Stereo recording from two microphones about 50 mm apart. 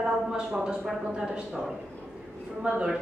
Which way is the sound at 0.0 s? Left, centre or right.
Centre.